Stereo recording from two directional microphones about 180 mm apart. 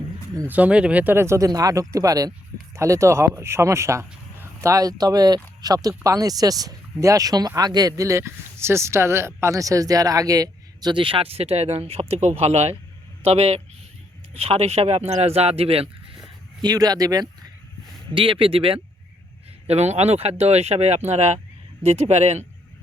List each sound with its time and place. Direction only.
0.3 s speech: 10° right (ahead or behind); by 15.9 s 35° right (ahead or behind)
16.6 s speech: 20° right (ahead or behind); by 22.4 s 35° right (ahead or behind)